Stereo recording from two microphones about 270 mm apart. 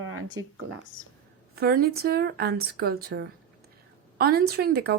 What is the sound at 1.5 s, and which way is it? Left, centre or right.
Speech, right.